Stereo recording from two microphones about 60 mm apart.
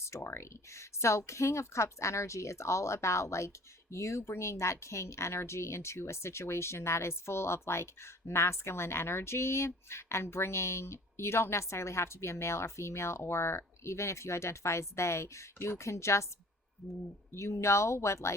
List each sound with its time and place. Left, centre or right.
0.3 s speech: left
16.8 s speech: centre
17.3 s speech: left